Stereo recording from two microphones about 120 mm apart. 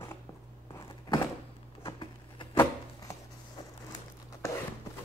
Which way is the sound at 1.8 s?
45° left (ahead or behind).